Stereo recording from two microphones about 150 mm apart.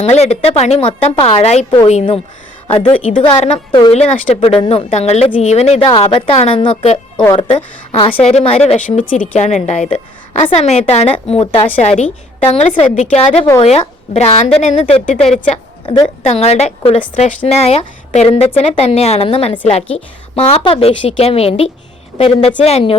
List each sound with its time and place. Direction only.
0.0 s a woman's voice: 45° left (ahead or behind)
3.7 s speech: 30° left (ahead or behind)
3.9 s a woman's voice: 50° left (ahead or behind)